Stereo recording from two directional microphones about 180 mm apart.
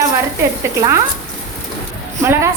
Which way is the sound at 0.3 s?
15° right (ahead or behind).